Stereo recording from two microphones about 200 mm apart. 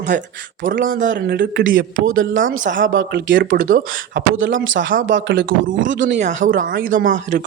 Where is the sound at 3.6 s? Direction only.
45° right (ahead or behind).